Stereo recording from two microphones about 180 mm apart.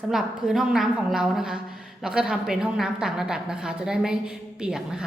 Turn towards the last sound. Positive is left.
turn(degrees=-5)  # may be behind; listen again after turning